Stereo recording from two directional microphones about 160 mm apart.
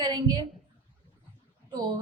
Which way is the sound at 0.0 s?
25° right (ahead or behind).